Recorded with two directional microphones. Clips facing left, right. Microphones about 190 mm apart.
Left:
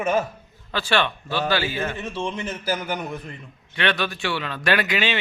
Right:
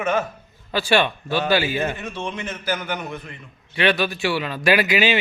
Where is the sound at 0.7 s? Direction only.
10° right (ahead or behind).